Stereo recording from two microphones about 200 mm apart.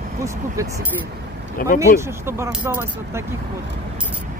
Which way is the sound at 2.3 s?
10° right (ahead or behind).